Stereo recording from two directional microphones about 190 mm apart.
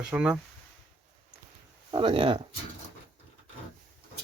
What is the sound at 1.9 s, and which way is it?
Speech, 25° right (ahead or behind).